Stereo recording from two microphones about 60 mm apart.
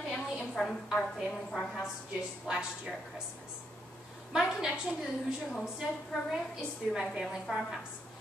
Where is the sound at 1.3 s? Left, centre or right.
Centre.